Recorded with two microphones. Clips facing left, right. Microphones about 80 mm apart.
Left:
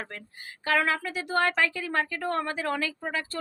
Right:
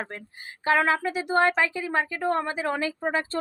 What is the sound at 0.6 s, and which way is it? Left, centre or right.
A woman's voice, right.